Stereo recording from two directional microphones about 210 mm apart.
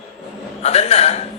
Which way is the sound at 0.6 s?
30° left (ahead or behind).